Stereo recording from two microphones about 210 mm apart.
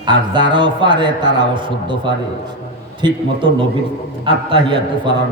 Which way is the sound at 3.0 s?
25° right (ahead or behind).